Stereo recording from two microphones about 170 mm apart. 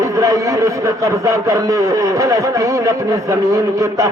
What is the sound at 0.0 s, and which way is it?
A man's voice, 20° right (ahead or behind).